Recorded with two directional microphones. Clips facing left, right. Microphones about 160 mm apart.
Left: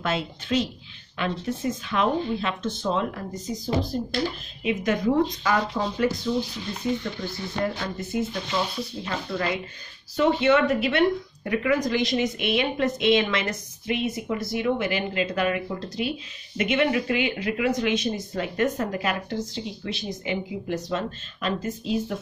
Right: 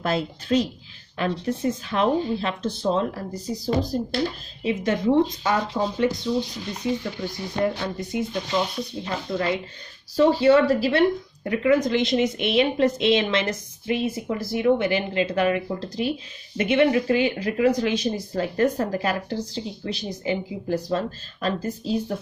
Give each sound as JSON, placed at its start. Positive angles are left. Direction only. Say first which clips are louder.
{"t": 0.0, "sound": "speech", "louder": "right 3 dB", "side_deg": -35}
{"t": 7.0, "sound": "stir", "louder": "right 1 dB", "side_deg": -15}
{"t": 7.8, "sound": "speech", "louder": "right 1 dB", "side_deg": -20}